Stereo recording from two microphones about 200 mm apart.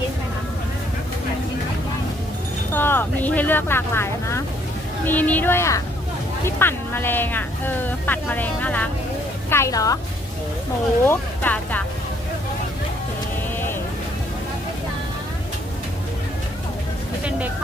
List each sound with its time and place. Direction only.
2.7 s speech: 10° left (ahead or behind)
11.0 s speech: 10° left (ahead or behind)